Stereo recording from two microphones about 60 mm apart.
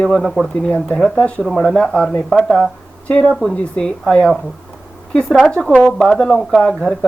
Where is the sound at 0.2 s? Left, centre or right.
Centre.